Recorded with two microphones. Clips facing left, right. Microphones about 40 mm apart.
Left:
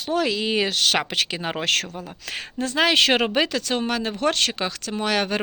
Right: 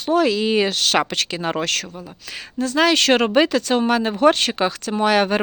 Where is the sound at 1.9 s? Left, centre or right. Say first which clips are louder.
Left 1 dB; left.